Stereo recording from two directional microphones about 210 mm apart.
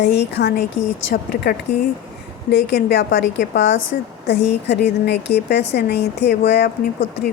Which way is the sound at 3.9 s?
45° left (ahead or behind).